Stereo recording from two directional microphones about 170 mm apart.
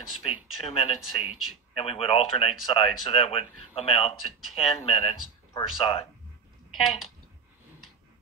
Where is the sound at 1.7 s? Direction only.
35° left (ahead or behind).